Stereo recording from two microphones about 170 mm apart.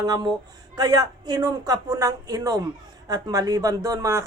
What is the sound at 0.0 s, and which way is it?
A woman's voice, 25° right (ahead or behind).